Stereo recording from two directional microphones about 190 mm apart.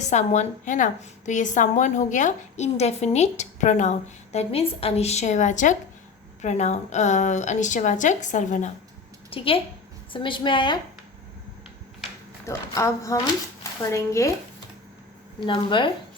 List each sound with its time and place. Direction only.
0.1 s a woman's voice: 35° left (ahead or behind)
9.3 s a woman's voice: 30° left (ahead or behind)
12.5 s speech: 15° left (ahead or behind)
15.4 s a woman's voice: 25° left (ahead or behind)